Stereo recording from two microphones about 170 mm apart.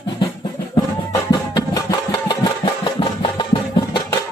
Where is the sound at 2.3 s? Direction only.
25° left (ahead or behind).